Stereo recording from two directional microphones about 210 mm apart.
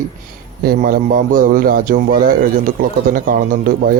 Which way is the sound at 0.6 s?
45° right (ahead or behind).